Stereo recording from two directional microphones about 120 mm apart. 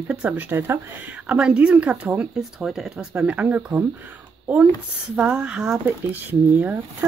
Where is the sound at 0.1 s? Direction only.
10° right (ahead or behind).